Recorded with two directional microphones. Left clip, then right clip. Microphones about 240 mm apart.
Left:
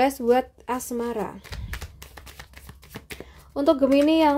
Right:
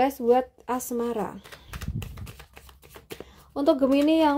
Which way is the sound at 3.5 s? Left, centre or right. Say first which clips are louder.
Left 2 dB; centre.